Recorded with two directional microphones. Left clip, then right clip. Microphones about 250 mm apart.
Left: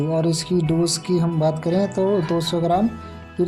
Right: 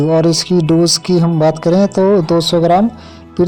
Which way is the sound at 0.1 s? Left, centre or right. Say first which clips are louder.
Right 9 dB; right.